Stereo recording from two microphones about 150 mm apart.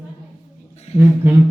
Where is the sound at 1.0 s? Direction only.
15° right (ahead or behind).